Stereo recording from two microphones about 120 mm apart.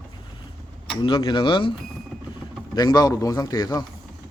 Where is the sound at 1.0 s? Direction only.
45° left (ahead or behind).